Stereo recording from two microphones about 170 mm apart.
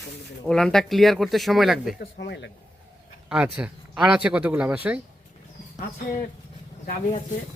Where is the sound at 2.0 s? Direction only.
85° left.